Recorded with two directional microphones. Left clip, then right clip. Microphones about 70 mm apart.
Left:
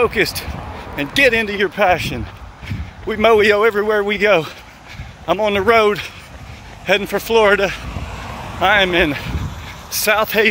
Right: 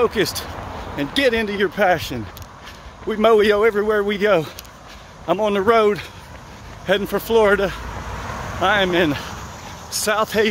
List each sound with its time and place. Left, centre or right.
0.1 s speech: right
0.9 s a man's voice: centre
1.6 s speech: right
3.1 s a man's voice: right
4.1 s a man's voice: right
5.2 s speech: right
5.7 s speech: centre
6.9 s speech: right
7.5 s speech: centre
8.3 s vehicle: centre
8.5 s speech: right
10.0 s a man's voice: centre